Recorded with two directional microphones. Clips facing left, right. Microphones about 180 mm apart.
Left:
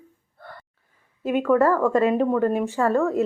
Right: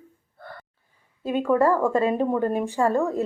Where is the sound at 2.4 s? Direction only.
30° right (ahead or behind).